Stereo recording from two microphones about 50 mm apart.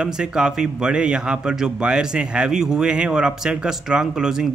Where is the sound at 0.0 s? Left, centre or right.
Centre.